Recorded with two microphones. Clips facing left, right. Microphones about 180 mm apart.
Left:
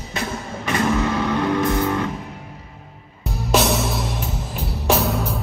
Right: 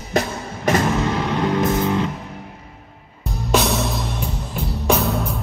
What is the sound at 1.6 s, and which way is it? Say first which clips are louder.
Music: right 1 dB; 20° right (ahead or behind).